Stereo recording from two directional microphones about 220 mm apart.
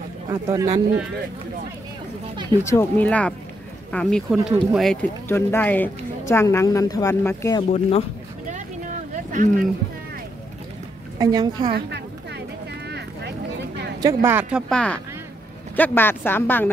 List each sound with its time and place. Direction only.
0.3 s speech: 15° right (ahead or behind)
2.6 s speech: 10° left (ahead or behind)
9.1 s a sound: 35° right (ahead or behind)
11.1 s speech: 20° right (ahead or behind)
11.7 s a sound: 50° right (ahead or behind)
14.0 s speech: 10° right (ahead or behind)
14.7 s speech: 5° left (ahead or behind)